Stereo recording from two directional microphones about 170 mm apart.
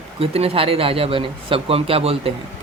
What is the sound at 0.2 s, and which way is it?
Speech, 35° right (ahead or behind).